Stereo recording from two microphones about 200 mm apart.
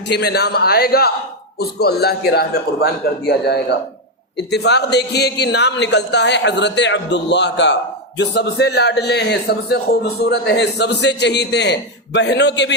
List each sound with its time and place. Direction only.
0.1 s a man's voice: 55° left (ahead or behind)